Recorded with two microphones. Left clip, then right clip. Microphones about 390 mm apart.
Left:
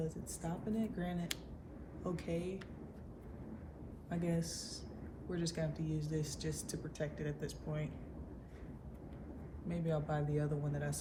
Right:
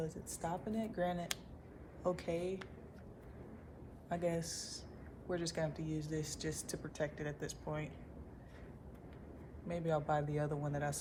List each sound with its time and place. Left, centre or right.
0.0 s speech: centre
4.1 s speech: centre
9.6 s speech: centre